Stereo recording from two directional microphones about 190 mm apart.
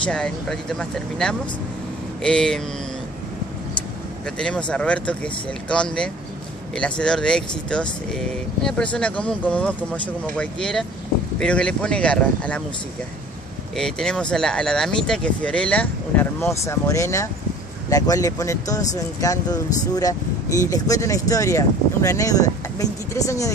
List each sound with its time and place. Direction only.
0.0 s speech: 5° left (ahead or behind)
4.4 s speech: 5° left (ahead or behind)
13.7 s speech: 5° left (ahead or behind)